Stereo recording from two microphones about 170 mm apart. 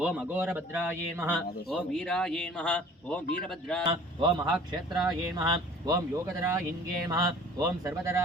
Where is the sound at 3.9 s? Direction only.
25° right (ahead or behind).